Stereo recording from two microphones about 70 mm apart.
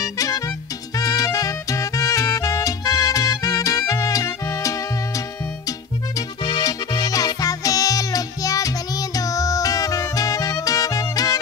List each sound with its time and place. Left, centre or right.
0.0 s music: left
5.7 s music: left